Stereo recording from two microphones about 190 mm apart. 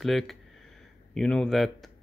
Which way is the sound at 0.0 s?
Centre (ahead or behind).